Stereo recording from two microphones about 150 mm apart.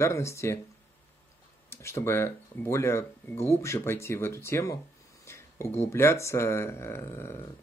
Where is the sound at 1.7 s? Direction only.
15° left (ahead or behind).